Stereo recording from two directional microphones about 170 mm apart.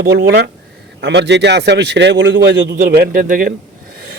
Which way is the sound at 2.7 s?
55° right (ahead or behind).